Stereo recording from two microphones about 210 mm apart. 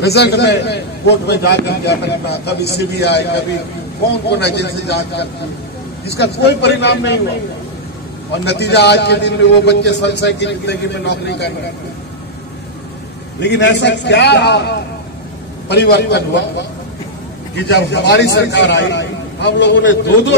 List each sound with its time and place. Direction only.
0.0 s a man's voice: 50° left (ahead or behind)
8.5 s a man's voice: 50° left (ahead or behind)
13.4 s a man's voice: 55° left (ahead or behind)